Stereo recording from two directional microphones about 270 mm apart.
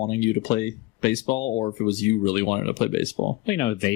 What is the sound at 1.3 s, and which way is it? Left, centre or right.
Speech, left.